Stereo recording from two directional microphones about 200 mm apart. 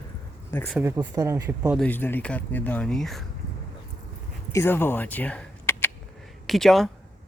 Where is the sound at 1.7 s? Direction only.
10° left (ahead or behind).